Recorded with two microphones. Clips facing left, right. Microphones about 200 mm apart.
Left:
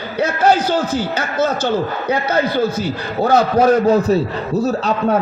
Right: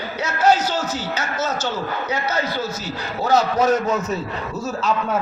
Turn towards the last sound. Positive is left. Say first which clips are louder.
# left 5 dB
turn(degrees=35)  # may be behind; listen again after turning